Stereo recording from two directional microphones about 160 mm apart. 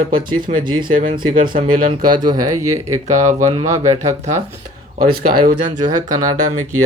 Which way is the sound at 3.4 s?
40° right (ahead or behind).